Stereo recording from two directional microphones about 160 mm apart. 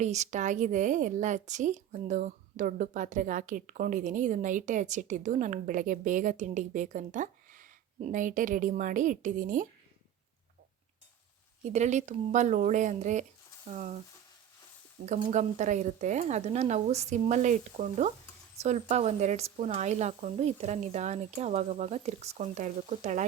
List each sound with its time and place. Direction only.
0.0 s a woman's voice: 45° right (ahead or behind)
11.6 s a woman's voice: 45° right (ahead or behind)
15.0 s a woman's voice: 50° right (ahead or behind)